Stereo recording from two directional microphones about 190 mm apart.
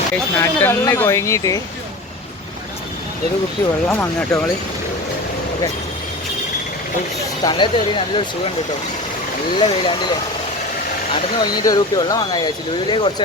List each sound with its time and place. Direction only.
0.3 s speech: 10° left (ahead or behind)
3.8 s speech: 5° left (ahead or behind)
7.4 s speech: 25° left (ahead or behind)
9.6 s speech: 25° left (ahead or behind)
11.3 s speech: 20° left (ahead or behind)